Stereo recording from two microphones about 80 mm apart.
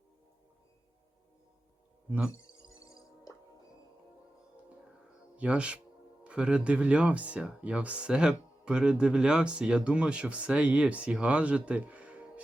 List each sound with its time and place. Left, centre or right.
2.0 s speech: centre
2.3 s music: left
5.4 s speech: centre